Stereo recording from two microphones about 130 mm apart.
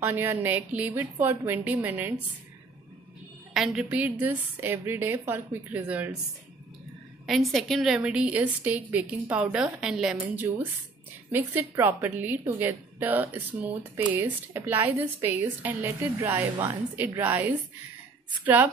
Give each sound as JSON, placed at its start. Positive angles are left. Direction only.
{"t": 0.0, "sound": "a woman's voice", "side_deg": -15}
{"t": 3.5, "sound": "a woman's voice", "side_deg": -5}
{"t": 7.2, "sound": "a woman's voice", "side_deg": 0}